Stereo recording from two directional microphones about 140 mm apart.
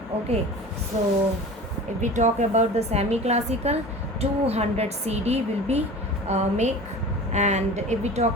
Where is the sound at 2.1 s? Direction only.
60° right (ahead or behind).